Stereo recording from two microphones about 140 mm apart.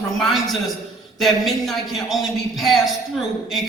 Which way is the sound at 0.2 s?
Centre (ahead or behind).